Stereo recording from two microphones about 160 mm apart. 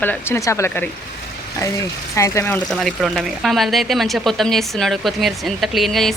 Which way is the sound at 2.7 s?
Centre (ahead or behind).